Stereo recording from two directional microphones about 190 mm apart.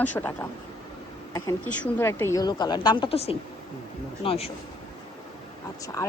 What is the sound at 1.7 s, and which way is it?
Speech, 5° left (ahead or behind).